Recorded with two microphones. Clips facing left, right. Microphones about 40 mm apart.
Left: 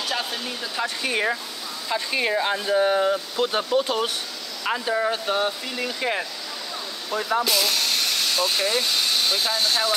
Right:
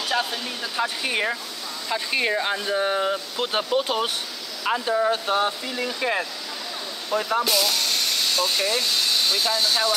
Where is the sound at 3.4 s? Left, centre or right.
Centre.